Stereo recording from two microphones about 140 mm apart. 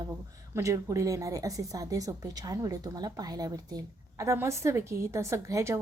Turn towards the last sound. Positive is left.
turn(degrees=-20)  # may be behind; listen again after turning